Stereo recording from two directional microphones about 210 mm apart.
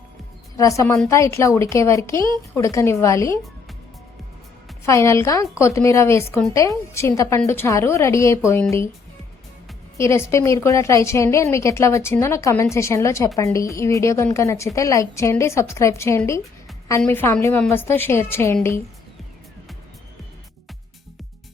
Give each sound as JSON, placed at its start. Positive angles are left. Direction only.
{"t": 0.5, "sound": "a woman's voice", "side_deg": 15}
{"t": 4.9, "sound": "a woman's voice", "side_deg": 15}
{"t": 10.0, "sound": "a woman's voice", "side_deg": 15}